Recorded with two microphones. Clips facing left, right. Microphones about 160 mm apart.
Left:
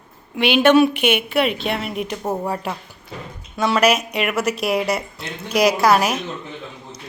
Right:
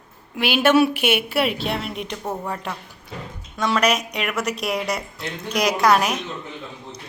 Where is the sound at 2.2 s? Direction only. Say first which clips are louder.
Left 5 dB; 25° left (ahead or behind).